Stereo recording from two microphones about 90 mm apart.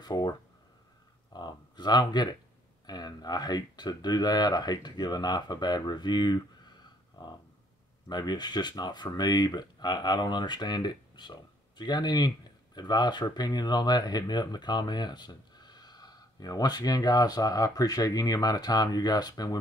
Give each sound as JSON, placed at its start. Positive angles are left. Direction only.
{"t": 0.0, "sound": "speech", "side_deg": 50}
{"t": 1.3, "sound": "speech", "side_deg": 55}
{"t": 8.1, "sound": "speech", "side_deg": 50}